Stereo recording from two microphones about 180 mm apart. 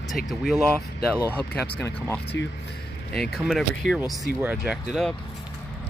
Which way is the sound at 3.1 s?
Centre (ahead or behind).